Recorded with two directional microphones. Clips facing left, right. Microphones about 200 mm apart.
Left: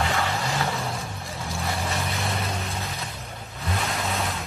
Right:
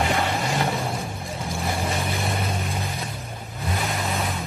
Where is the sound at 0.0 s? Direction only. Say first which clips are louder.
Right 3 dB; 25° right (ahead or behind).